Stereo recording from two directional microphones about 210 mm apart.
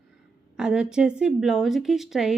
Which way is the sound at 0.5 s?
5° right (ahead or behind).